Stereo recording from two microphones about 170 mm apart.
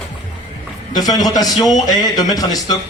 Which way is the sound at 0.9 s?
25° left (ahead or behind).